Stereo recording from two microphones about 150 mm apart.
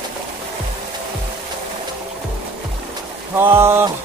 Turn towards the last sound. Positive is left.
turn(degrees=-15)  # may be behind; listen again after turning